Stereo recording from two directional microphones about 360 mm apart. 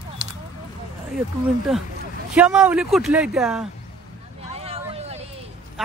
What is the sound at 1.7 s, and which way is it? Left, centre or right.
Speech, centre.